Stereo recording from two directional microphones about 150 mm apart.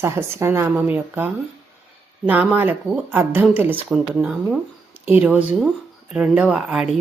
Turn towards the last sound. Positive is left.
turn(degrees=-5)  # may be behind; listen again after turning